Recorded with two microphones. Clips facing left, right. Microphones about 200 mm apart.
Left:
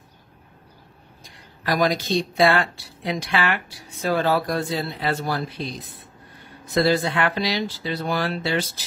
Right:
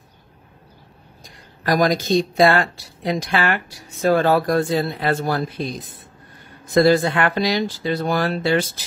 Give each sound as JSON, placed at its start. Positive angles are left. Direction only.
{"t": 1.6, "sound": "a woman's voice", "side_deg": -45}